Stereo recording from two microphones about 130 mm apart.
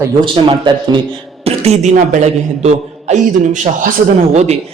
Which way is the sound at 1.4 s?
55° right (ahead or behind).